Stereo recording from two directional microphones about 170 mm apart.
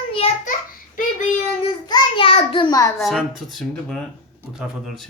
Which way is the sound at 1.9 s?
30° left (ahead or behind).